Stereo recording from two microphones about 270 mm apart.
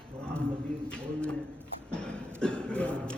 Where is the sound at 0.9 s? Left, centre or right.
Centre.